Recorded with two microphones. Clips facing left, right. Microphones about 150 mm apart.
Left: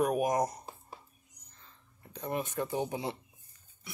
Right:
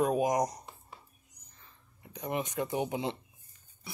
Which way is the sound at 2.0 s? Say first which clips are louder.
Right 1 dB; 15° right (ahead or behind).